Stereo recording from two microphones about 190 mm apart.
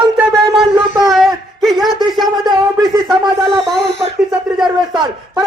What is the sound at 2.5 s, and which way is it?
Speech, 20° right (ahead or behind).